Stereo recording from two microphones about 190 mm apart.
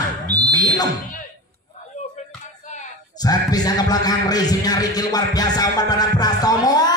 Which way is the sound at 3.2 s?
20° left (ahead or behind).